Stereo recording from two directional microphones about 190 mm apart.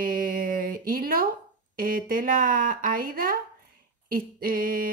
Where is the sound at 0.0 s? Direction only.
50° right (ahead or behind).